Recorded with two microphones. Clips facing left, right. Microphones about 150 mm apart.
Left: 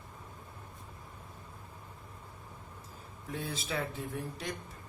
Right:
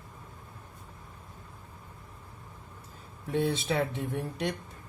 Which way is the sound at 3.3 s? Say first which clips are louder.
Right 9 dB; 70° right (ahead or behind).